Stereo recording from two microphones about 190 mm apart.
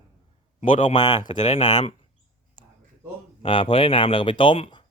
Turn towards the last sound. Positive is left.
turn(degrees=25)  # may be behind; listen again after turning